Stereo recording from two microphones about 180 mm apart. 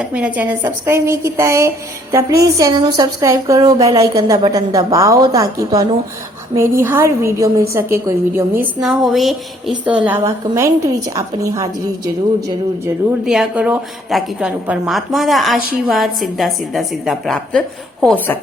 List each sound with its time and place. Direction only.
0.0 s a woman's voice: 5° right (ahead or behind)
8.8 s a woman's voice: centre (ahead or behind); by 12.1 s 20° right (ahead or behind)
13.2 s a woman's voice: centre (ahead or behind)